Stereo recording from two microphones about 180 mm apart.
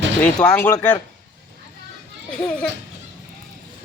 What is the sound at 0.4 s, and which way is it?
Speech, 10° left (ahead or behind).